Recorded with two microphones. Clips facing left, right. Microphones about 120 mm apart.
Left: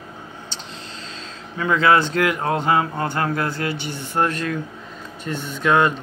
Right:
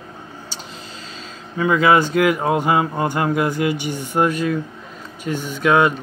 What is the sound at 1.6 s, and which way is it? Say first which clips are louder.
Speech: right 2 dB; 10° right (ahead or behind).